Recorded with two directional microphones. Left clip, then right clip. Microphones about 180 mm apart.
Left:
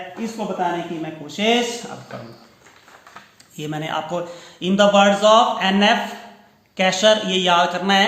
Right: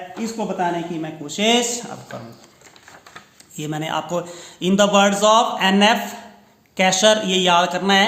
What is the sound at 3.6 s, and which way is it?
A man's voice, 25° right (ahead or behind).